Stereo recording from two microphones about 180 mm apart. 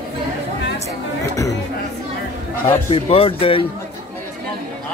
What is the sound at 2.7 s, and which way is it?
A man's voice, 30° left (ahead or behind).